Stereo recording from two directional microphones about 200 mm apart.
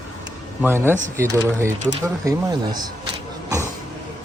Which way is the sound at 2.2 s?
20° right (ahead or behind).